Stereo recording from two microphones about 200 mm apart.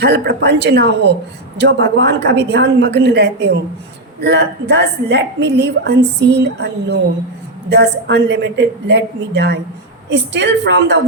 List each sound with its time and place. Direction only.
0.0 s a woman's voice: 55° right (ahead or behind)